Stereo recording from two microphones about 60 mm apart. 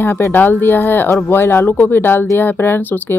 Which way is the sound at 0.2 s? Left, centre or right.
Left.